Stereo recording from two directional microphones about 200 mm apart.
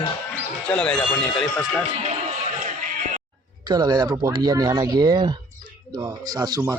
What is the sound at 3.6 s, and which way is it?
Speech, 20° right (ahead or behind).